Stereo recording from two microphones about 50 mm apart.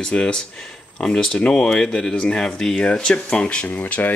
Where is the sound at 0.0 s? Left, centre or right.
Centre.